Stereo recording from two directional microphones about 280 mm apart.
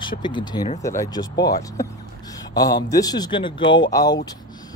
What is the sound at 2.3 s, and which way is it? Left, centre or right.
Speech, centre.